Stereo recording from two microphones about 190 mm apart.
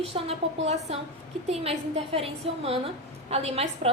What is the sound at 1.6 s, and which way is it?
A woman's voice, 30° right (ahead or behind).